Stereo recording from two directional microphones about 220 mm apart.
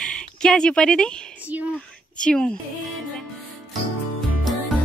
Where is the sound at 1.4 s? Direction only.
5° right (ahead or behind).